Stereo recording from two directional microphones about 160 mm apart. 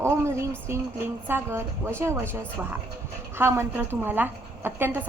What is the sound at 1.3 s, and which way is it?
A woman's voice, 15° right (ahead or behind).